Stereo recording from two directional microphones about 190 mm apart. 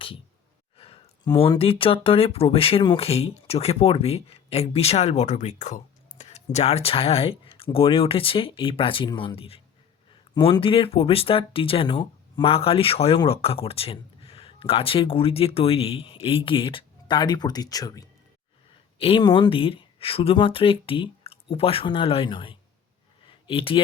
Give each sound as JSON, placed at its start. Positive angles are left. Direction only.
{"t": 0.8, "sound": "speech", "side_deg": 25}
{"t": 18.9, "sound": "speech", "side_deg": 30}
{"t": 23.2, "sound": "a sound", "side_deg": 30}